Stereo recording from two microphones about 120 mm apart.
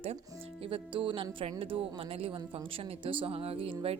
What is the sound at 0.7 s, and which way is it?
Speech, 45° right (ahead or behind).